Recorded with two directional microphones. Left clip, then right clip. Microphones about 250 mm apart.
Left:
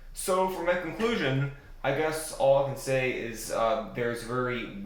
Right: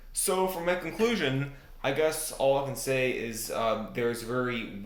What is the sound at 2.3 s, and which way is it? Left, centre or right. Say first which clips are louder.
Speech: left 5 dB; right.